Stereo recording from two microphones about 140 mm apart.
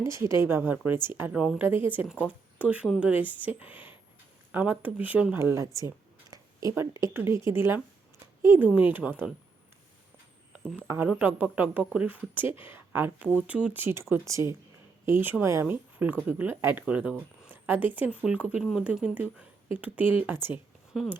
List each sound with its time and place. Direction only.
0.0 s speech: 20° right (ahead or behind)
10.8 s speech: 15° right (ahead or behind)